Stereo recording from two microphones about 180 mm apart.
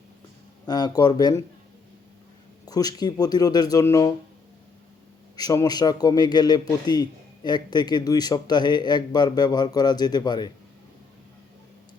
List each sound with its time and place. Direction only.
0.7 s a man's voice: 20° left (ahead or behind)
2.6 s a man's voice: 20° left (ahead or behind)
5.4 s a man's voice: 20° left (ahead or behind)